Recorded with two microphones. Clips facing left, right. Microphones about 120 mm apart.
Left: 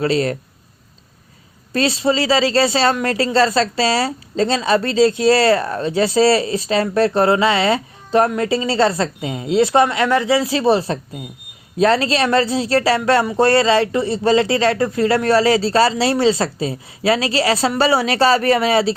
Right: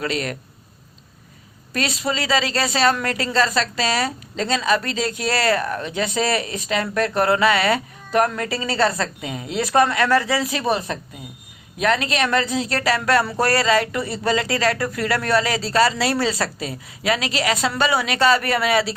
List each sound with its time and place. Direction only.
0.0 s speech: 30° left (ahead or behind)
1.7 s speech: 30° left (ahead or behind)